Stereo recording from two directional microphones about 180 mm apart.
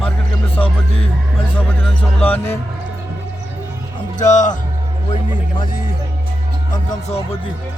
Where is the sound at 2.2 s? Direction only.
10° left (ahead or behind).